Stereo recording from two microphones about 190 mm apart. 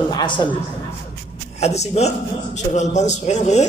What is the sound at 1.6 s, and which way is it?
A man's voice, 35° left (ahead or behind).